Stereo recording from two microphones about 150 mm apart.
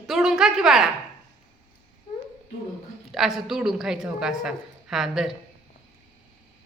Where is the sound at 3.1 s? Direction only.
Centre (ahead or behind).